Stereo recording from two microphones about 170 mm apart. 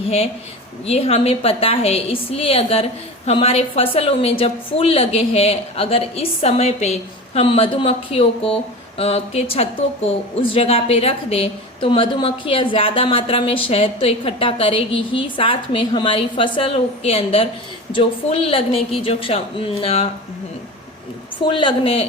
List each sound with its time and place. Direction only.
0.9 s a woman's voice: 35° left (ahead or behind)
21.4 s a woman's voice: 30° left (ahead or behind)